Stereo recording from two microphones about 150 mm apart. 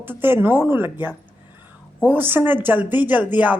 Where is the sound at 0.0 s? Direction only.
15° right (ahead or behind).